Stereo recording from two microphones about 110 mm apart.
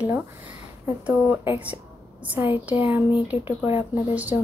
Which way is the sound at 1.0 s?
15° right (ahead or behind).